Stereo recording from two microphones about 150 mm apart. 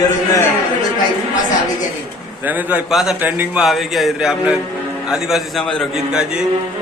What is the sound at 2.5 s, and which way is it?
A man's voice, 5° right (ahead or behind).